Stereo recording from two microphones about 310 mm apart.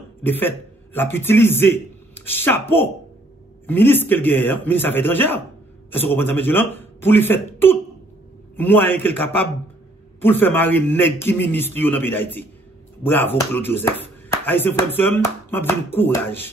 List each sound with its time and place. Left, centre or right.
0.2 s a man's voice: centre